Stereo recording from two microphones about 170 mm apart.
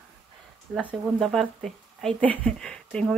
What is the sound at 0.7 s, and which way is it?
Speech, centre (ahead or behind).